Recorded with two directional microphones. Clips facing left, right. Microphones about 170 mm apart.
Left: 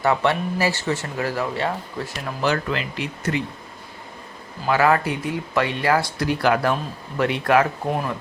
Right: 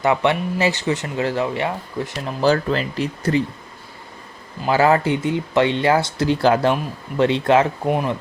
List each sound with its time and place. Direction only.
0.0 s speech: 20° right (ahead or behind)
2.4 s speech: 35° right (ahead or behind)
4.6 s speech: 25° right (ahead or behind)